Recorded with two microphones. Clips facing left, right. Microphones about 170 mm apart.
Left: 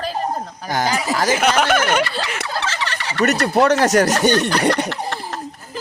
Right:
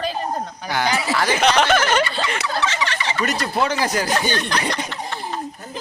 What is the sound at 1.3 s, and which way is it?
Speech, 10° left (ahead or behind).